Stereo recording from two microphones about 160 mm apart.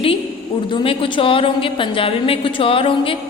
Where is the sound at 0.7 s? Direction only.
30° left (ahead or behind).